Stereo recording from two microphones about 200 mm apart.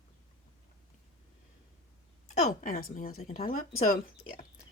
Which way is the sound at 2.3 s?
45° left (ahead or behind).